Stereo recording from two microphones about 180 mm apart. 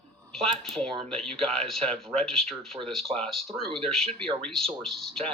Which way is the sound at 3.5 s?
30° right (ahead or behind).